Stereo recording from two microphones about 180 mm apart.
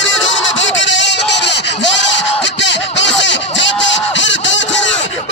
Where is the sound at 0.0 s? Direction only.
90° left.